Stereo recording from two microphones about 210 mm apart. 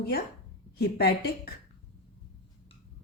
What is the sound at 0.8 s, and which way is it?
Speech, 50° left (ahead or behind).